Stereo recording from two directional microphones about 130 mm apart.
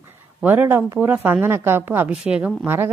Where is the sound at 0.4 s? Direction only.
15° right (ahead or behind).